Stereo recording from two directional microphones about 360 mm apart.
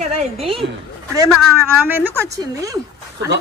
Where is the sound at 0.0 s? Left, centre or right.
Centre.